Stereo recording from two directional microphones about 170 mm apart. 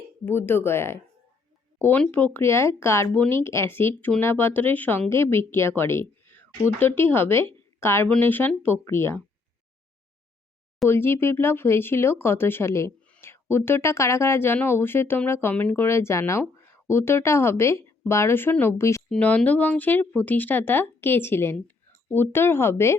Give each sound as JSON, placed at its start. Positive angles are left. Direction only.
{"t": 0.3, "sound": "speech", "side_deg": 10}
{"t": 10.8, "sound": "speech", "side_deg": 15}
{"t": 19.1, "sound": "speech", "side_deg": 5}